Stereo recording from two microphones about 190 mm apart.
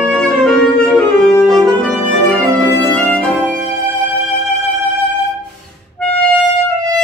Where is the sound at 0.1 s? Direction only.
5° left (ahead or behind).